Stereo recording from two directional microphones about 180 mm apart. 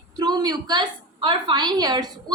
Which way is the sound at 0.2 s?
25° right (ahead or behind).